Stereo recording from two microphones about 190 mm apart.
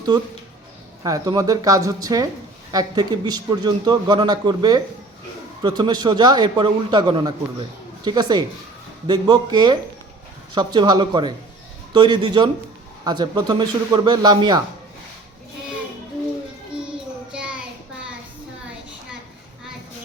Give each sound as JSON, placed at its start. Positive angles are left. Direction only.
{"t": 1.0, "sound": "a man's voice", "side_deg": -20}
{"t": 17.3, "sound": "child singing", "side_deg": -5}